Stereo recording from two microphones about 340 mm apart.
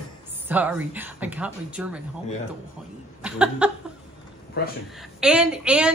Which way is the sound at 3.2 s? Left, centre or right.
Centre.